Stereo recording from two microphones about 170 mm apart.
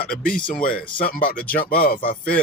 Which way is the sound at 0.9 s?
55° left (ahead or behind).